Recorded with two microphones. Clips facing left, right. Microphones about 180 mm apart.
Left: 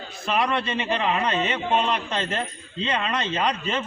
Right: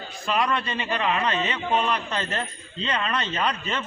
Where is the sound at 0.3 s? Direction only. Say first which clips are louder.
Left 1 dB; 20° left (ahead or behind).